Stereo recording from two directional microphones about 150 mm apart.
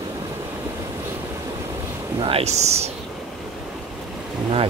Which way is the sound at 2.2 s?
40° right (ahead or behind).